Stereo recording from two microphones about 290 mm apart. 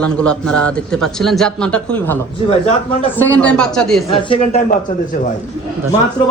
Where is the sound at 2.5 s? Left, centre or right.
Left.